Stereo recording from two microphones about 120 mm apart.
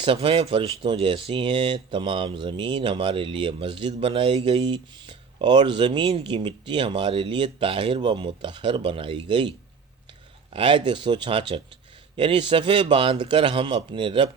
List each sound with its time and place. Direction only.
0.0 s speech: 45° right (ahead or behind)